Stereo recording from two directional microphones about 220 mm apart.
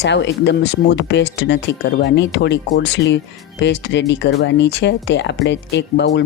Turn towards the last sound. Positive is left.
turn(degrees=50)  # may be behind; listen again after turning